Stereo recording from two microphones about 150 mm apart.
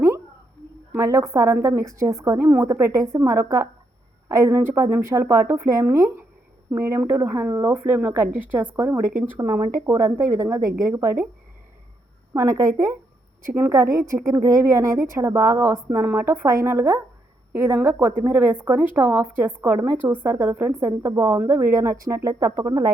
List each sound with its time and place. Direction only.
0.9 s a woman's voice: 20° right (ahead or behind)
12.3 s a woman's voice: 20° right (ahead or behind)